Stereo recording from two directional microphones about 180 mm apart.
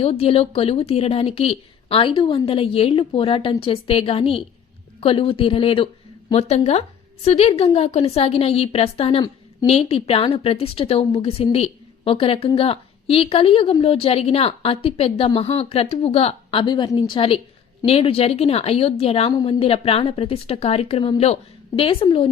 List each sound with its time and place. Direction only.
0.0 s a woman's voice: 30° left (ahead or behind)